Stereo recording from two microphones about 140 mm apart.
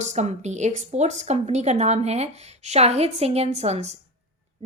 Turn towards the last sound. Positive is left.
turn(degrees=-50)  # may be behind; listen again after turning